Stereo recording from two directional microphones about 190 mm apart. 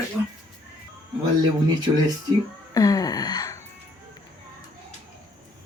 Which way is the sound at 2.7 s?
20° left (ahead or behind).